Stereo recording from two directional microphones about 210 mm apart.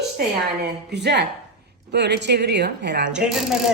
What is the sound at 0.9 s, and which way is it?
Speech, 55° right (ahead or behind).